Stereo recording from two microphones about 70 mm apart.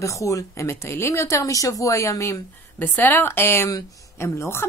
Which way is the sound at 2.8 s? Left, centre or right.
Left.